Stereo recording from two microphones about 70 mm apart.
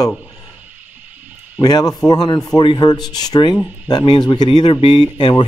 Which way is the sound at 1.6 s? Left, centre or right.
Left.